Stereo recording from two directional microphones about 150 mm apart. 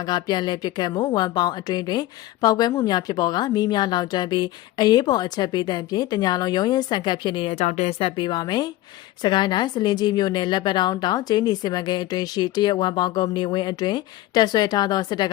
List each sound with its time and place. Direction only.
0.0 s a woman's voice: 30° left (ahead or behind)